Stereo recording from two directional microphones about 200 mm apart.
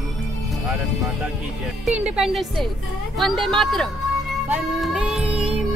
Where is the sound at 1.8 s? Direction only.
5° right (ahead or behind).